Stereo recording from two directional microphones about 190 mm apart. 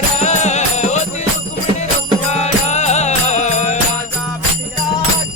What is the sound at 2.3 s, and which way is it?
Music, 35° left (ahead or behind).